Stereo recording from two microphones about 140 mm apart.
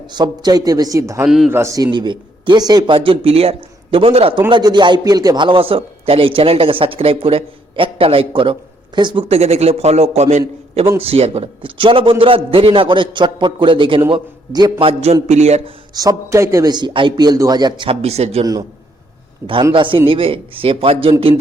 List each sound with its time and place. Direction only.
0.1 s a man's voice: 30° right (ahead or behind)
14.8 s a man's voice: 50° right (ahead or behind)
16.0 s a man's voice: 25° right (ahead or behind)
18.0 s a man's voice: 50° right (ahead or behind)
19.7 s a man's voice: 35° right (ahead or behind)